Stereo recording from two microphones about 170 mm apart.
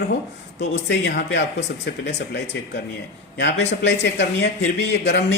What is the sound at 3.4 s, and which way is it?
Speech, 90° left.